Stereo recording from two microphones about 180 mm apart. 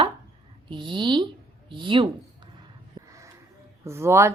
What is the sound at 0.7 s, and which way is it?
Speech, 25° right (ahead or behind).